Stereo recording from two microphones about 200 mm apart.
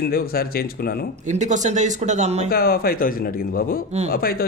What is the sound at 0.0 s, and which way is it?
Speech, 50° left (ahead or behind).